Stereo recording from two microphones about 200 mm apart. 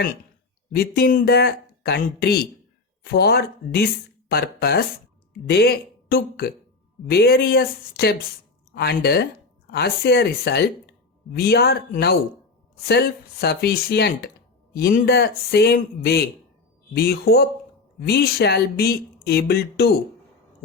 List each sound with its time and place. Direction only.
0.7 s speech: 50° left (ahead or behind)